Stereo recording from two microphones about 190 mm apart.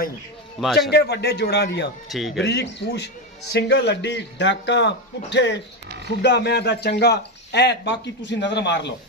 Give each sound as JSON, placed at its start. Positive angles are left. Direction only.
{"t": 0.7, "sound": "speech", "side_deg": 60}
{"t": 2.0, "sound": "speech", "side_deg": 0}
{"t": 2.4, "sound": "speech", "side_deg": 65}